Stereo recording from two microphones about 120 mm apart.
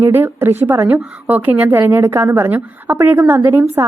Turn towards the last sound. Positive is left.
turn(degrees=-15)  # may be behind; listen again after turning